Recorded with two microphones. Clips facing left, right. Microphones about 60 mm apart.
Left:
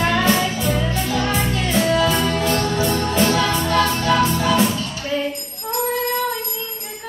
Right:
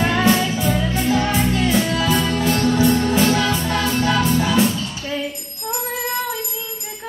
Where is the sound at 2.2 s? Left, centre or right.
Left.